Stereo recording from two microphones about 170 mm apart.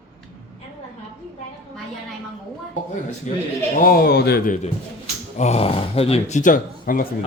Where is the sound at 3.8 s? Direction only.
60° left (ahead or behind).